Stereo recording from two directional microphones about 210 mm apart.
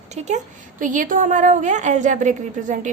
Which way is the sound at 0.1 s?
35° right (ahead or behind).